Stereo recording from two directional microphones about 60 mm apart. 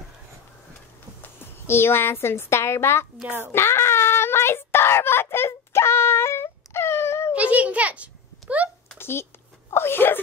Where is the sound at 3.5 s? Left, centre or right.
Left.